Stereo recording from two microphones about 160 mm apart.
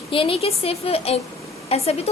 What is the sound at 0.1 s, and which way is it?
A woman's voice, 35° left (ahead or behind).